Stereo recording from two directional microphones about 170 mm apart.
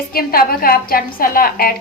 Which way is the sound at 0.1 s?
60° left (ahead or behind).